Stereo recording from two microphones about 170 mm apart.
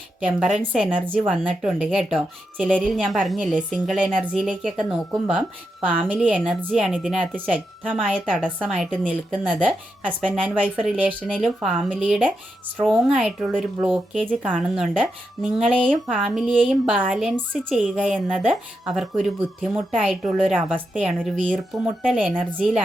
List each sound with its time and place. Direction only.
0.2 s a woman's voice: 5° right (ahead or behind)
17.3 s a woman's voice: 5° left (ahead or behind)